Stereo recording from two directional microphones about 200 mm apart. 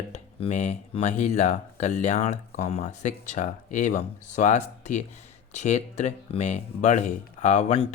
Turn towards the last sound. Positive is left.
turn(degrees=30)  # may be behind; listen again after turning